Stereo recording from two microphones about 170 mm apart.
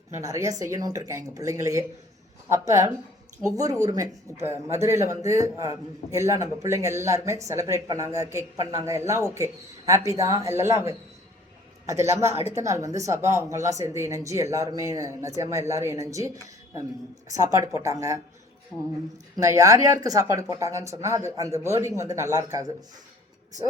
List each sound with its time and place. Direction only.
0.2 s speech: 20° right (ahead or behind)
19.4 s speech: 20° right (ahead or behind)